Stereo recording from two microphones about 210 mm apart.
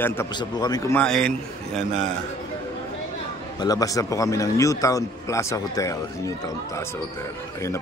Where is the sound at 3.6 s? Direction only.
15° left (ahead or behind).